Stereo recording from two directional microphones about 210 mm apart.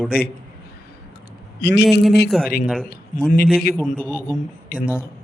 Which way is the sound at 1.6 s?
55° left (ahead or behind).